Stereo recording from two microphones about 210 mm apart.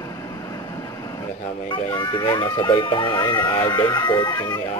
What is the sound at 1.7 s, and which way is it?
Speech, 20° left (ahead or behind).